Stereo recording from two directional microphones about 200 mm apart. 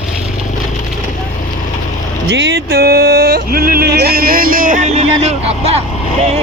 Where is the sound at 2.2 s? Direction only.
60° right (ahead or behind); by 5.8 s 30° right (ahead or behind).